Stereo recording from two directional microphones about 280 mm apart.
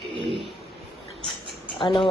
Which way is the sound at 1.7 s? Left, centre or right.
Centre.